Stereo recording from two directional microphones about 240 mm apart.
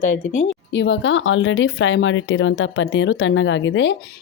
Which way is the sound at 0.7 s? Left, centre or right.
Left.